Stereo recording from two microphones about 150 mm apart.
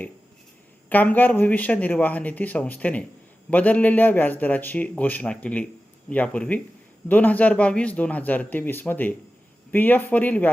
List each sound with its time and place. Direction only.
0.9 s a man's voice: 10° left (ahead or behind)